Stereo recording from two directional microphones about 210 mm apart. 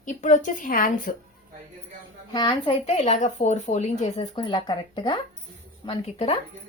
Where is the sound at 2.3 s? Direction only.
25° left (ahead or behind).